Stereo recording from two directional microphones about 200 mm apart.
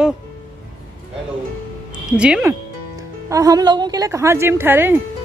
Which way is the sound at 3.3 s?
15° right (ahead or behind).